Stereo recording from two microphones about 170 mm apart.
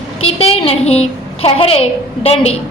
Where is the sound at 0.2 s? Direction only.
35° left (ahead or behind).